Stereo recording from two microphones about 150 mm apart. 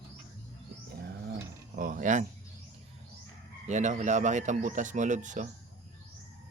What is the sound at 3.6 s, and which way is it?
A man's voice, 55° right (ahead or behind).